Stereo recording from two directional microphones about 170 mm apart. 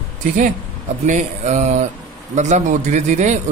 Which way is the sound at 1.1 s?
45° right (ahead or behind).